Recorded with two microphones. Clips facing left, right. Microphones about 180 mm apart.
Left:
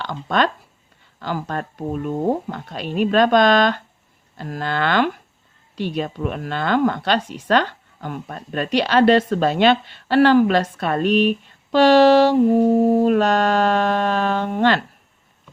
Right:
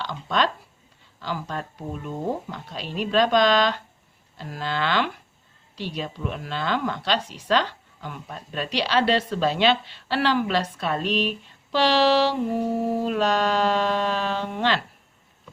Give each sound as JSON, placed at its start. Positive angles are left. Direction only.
{"t": 0.0, "sound": "a woman's voice", "side_deg": 55}